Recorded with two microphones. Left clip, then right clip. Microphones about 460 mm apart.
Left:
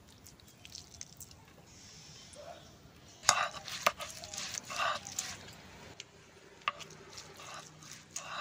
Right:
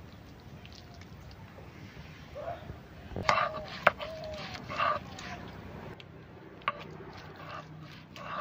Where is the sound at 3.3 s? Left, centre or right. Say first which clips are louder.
Right 3 dB; left.